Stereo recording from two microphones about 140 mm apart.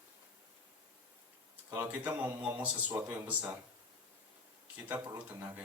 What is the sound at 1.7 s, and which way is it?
Speech, 15° right (ahead or behind).